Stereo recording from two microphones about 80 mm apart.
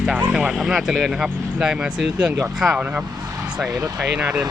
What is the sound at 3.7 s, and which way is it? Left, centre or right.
Speech, right.